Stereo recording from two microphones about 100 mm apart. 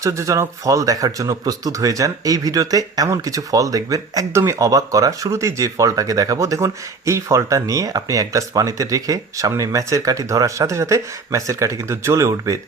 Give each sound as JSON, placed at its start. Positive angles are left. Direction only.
{"t": 0.0, "sound": "speech", "side_deg": -30}